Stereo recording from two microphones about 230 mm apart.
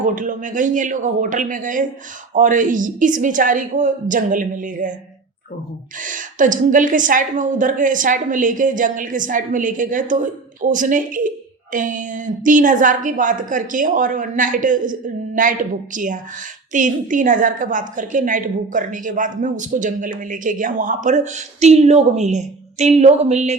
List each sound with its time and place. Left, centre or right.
0.0 s a woman's voice: right
6.0 s a woman's voice: right